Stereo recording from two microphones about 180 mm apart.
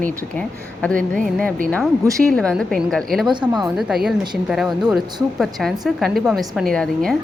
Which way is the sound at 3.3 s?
25° right (ahead or behind).